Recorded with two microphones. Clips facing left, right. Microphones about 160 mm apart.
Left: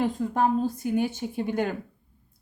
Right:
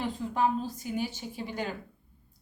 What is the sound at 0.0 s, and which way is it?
A woman's voice, 50° left (ahead or behind).